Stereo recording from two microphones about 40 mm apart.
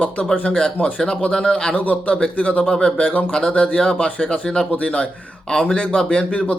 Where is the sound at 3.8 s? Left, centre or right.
Centre.